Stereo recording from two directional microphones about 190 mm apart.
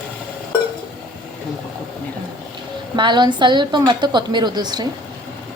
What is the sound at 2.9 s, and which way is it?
A woman's voice, 25° right (ahead or behind).